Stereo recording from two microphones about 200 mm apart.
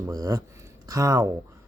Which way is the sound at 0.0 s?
20° right (ahead or behind).